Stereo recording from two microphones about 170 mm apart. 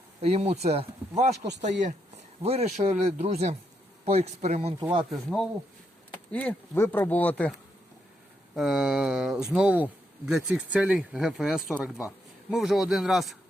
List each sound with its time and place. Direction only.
0.2 s speech: 35° right (ahead or behind)
2.4 s speech: 35° right (ahead or behind)
4.8 s speech: 25° right (ahead or behind)
5.1 s speech: centre (ahead or behind)
8.5 s speech: 5° right (ahead or behind)